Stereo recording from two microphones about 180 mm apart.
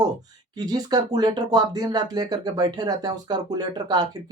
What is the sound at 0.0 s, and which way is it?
Speech, 20° right (ahead or behind).